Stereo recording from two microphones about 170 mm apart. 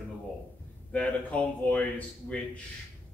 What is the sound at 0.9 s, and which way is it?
Speech, 10° left (ahead or behind).